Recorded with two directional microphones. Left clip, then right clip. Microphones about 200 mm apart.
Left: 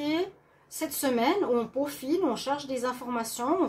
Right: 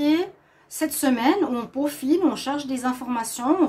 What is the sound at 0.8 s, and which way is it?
A woman's voice, 45° right (ahead or behind).